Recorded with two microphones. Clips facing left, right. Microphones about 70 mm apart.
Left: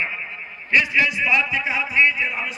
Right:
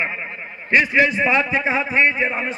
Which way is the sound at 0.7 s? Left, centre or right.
Right.